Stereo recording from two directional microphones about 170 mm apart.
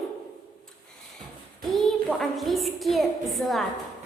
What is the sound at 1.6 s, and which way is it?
A woman's voice, 5° left (ahead or behind).